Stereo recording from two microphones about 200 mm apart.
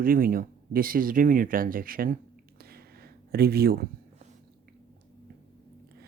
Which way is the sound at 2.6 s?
50° right (ahead or behind).